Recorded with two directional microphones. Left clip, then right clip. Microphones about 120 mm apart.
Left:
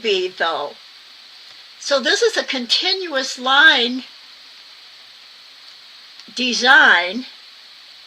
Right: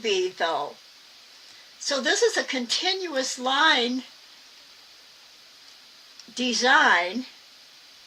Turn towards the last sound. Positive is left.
turn(degrees=35)  # may be behind; listen again after turning